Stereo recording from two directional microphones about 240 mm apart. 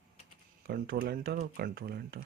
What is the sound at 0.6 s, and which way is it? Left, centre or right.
Speech, right.